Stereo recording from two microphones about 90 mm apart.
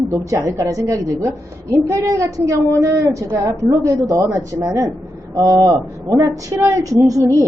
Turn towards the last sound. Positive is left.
turn(degrees=-40)  # may be behind; listen again after turning